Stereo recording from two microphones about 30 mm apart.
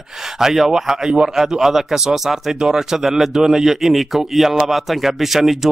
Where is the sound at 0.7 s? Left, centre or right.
Centre.